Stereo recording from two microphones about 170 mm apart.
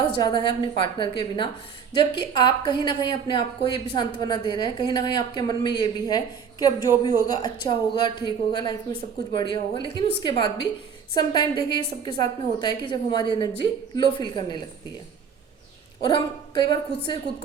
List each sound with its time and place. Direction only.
0.2 s a woman's voice: 25° left (ahead or behind)
16.0 s a woman's voice: 25° left (ahead or behind)